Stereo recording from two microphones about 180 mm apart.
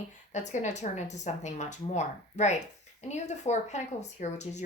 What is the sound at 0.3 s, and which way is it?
Speech, 40° left (ahead or behind).